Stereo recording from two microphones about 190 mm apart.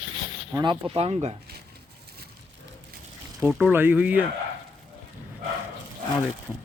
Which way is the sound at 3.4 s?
5° right (ahead or behind).